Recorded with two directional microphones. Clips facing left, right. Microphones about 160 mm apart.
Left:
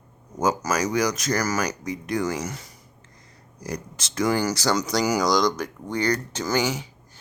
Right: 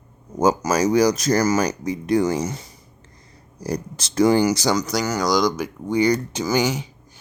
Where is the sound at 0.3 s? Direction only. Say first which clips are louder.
Right 5 dB; 30° right (ahead or behind).